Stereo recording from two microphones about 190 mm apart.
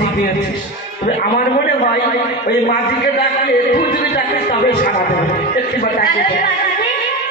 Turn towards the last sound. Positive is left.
turn(degrees=50)  # may be behind; listen again after turning